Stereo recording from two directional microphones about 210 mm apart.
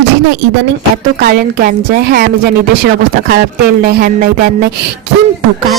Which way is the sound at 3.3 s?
45° right (ahead or behind).